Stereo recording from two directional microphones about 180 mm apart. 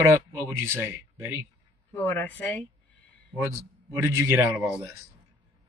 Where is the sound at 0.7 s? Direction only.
15° right (ahead or behind).